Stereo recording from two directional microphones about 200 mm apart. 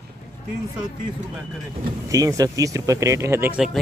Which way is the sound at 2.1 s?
15° right (ahead or behind).